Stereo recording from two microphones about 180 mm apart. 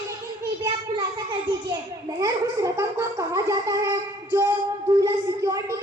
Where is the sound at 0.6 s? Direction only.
25° right (ahead or behind).